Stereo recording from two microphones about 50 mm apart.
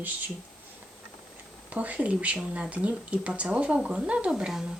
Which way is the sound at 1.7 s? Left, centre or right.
Right.